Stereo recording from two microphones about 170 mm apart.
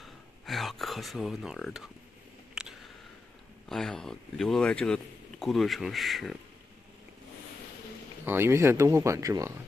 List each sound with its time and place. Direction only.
0.0 s a sound: centre (ahead or behind)
3.6 s speech: centre (ahead or behind)
8.3 s speech: 15° right (ahead or behind)